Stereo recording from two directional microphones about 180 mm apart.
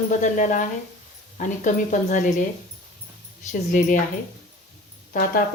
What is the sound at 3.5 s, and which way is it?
Speech, 45° left (ahead or behind).